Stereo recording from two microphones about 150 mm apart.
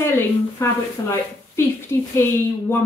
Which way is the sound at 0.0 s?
20° left (ahead or behind).